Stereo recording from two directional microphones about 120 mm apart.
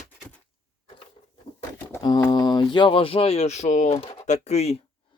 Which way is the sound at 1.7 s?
15° left (ahead or behind).